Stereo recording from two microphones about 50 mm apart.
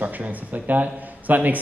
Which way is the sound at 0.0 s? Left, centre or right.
Right.